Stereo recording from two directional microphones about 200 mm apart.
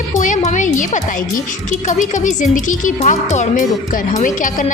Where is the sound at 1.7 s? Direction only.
40° left (ahead or behind).